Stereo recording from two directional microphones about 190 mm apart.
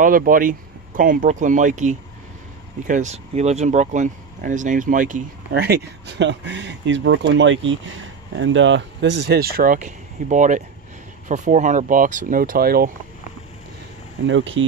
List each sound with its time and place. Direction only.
0.0 s speech: 45° right (ahead or behind)
5.5 s speech: 60° right (ahead or behind)
14.2 s speech: 80° right